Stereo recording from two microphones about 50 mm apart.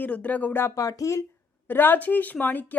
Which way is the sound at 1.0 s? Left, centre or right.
Left.